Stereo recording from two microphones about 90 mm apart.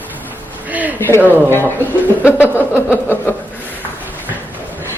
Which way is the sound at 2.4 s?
25° left (ahead or behind).